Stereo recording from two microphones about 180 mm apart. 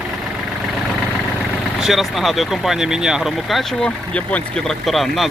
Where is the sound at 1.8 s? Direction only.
Centre (ahead or behind).